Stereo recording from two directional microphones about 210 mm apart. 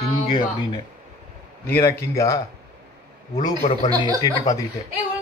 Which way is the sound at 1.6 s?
10° left (ahead or behind).